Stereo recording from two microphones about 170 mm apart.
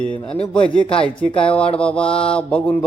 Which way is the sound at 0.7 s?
5° left (ahead or behind).